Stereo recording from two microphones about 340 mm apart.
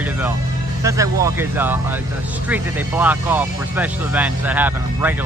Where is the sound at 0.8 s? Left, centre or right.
Centre.